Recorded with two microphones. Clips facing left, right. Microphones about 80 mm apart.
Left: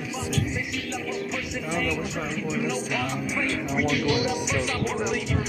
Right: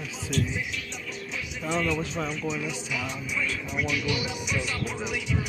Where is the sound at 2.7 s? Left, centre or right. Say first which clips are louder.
Left 6 dB; left.